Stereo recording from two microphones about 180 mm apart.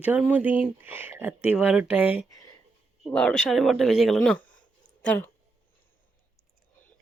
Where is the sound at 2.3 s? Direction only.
20° left (ahead or behind).